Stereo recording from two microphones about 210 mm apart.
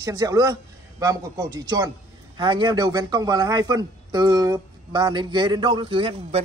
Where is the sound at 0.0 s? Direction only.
15° right (ahead or behind).